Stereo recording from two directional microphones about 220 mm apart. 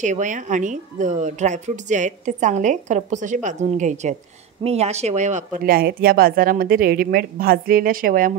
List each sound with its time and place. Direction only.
0.0 s a woman's voice: 35° right (ahead or behind)